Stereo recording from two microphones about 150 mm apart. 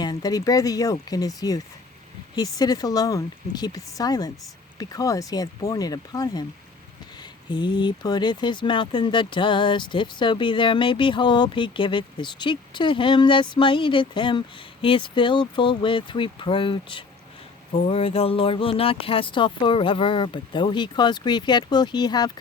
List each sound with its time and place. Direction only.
0.0 s speech: 25° left (ahead or behind)
7.5 s speech: 30° left (ahead or behind)